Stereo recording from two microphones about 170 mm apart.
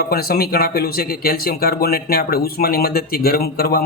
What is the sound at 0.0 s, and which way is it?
Speech, 65° left (ahead or behind).